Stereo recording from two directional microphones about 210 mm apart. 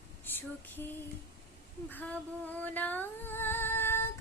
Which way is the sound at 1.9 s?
10° left (ahead or behind).